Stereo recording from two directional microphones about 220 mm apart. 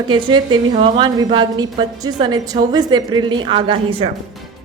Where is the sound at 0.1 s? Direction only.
20° right (ahead or behind).